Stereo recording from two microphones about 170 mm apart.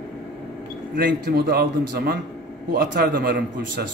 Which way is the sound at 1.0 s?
75° right (ahead or behind).